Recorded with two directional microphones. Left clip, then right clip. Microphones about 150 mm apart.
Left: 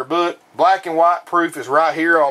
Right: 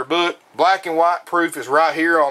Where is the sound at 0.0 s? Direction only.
25° right (ahead or behind).